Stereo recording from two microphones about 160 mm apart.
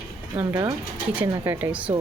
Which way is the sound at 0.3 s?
35° right (ahead or behind).